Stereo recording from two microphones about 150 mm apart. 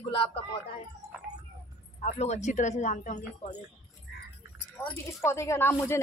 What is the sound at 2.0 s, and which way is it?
Speech, 50° left (ahead or behind).